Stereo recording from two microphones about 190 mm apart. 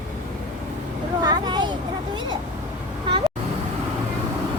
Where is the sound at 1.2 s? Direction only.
20° right (ahead or behind).